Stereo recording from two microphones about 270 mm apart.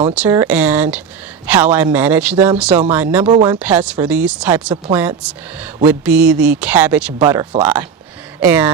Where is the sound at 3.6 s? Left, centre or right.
Centre.